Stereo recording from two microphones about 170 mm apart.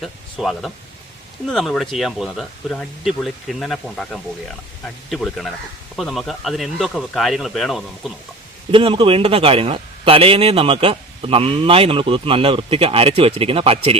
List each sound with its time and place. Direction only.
0.0 s speech: centre (ahead or behind)
8.7 s a man's voice: 30° right (ahead or behind)